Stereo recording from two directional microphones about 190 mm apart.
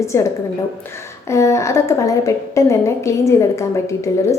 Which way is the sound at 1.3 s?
15° left (ahead or behind).